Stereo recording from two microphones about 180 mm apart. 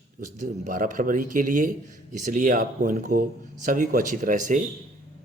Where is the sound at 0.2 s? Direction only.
45° right (ahead or behind).